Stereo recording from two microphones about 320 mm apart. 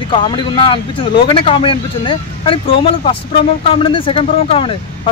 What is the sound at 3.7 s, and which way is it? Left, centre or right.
Speech, centre.